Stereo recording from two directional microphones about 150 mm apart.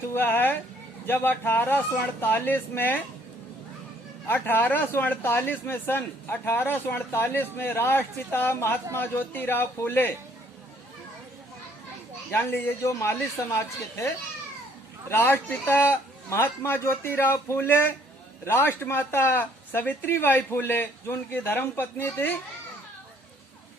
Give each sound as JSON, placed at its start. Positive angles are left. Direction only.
{"t": 0.1, "sound": "speech", "side_deg": 15}
{"t": 4.3, "sound": "speech", "side_deg": 15}
{"t": 12.3, "sound": "speech", "side_deg": 15}
{"t": 15.1, "sound": "speech", "side_deg": 15}